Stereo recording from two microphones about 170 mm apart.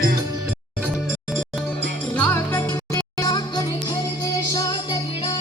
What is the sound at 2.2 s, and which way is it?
Music, 15° left (ahead or behind).